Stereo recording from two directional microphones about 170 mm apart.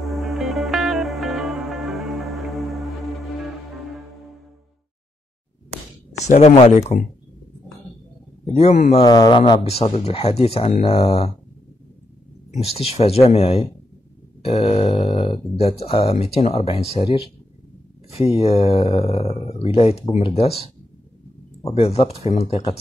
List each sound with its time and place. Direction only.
0.0 s music: centre (ahead or behind)
6.2 s speech: 40° left (ahead or behind)
8.5 s speech: 40° left (ahead or behind)
8.9 s mantra: 25° left (ahead or behind)
9.6 s speech: 35° left (ahead or behind)
12.4 s speech: 35° left (ahead or behind)
21.7 s speech: 35° left (ahead or behind)